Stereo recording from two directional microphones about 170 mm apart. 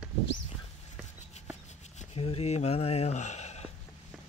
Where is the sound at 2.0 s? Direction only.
35° left (ahead or behind).